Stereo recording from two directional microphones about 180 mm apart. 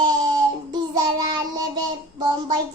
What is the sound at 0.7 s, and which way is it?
Child singing, 20° right (ahead or behind).